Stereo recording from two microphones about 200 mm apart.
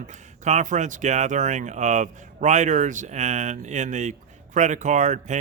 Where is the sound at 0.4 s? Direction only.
35° right (ahead or behind).